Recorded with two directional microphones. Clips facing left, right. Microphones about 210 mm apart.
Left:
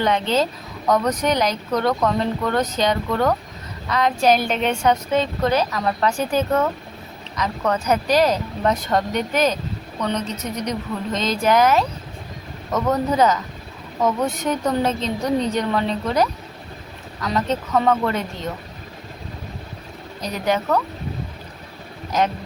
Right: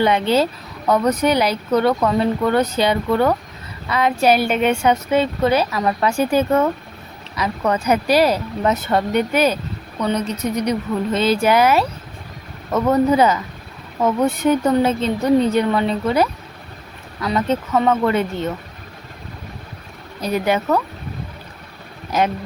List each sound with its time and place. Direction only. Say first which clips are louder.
0.9 s speech: right 3 dB; 10° right (ahead or behind)
20.2 s speech: right 3 dB; 5° right (ahead or behind)